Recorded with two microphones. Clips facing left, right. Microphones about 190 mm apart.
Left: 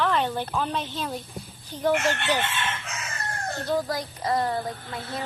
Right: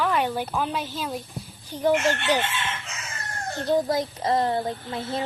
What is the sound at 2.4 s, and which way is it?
Chicken, 55° left (ahead or behind).